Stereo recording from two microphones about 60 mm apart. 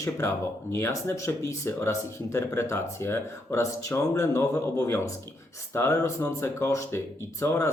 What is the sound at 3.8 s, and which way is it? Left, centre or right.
A man's voice, left.